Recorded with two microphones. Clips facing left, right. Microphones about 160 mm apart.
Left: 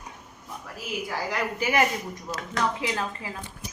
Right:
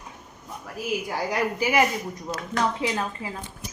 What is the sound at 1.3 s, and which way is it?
Speech, 10° right (ahead or behind).